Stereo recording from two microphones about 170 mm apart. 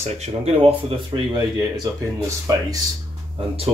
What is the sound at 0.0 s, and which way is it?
Speech, 40° right (ahead or behind).